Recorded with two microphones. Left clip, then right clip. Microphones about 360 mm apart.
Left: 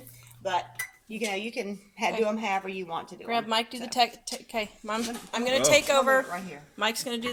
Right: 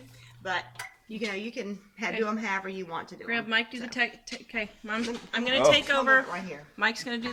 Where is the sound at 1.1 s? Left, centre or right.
Centre.